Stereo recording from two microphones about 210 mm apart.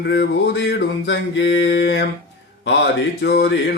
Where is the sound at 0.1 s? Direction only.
55° left (ahead or behind).